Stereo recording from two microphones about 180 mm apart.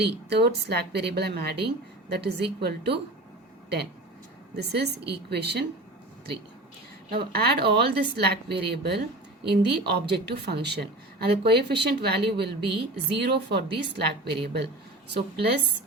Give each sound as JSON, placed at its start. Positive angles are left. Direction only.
{"t": 0.0, "sound": "a woman's voice", "side_deg": -65}
{"t": 4.5, "sound": "a woman's voice", "side_deg": -65}
{"t": 7.1, "sound": "a woman's voice", "side_deg": -60}